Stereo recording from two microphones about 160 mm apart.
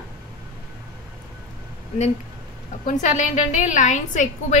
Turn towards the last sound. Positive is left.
turn(degrees=50)  # may be behind; listen again after turning